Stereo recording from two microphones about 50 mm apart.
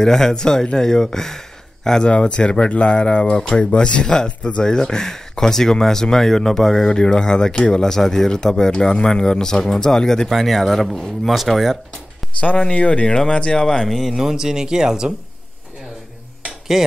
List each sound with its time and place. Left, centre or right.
0.0 s speech: centre
12.4 s speech: left
13.8 s speech: centre
16.7 s speech: centre